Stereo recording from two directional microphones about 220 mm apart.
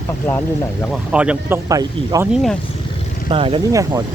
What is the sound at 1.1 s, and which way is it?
Speech, 5° right (ahead or behind).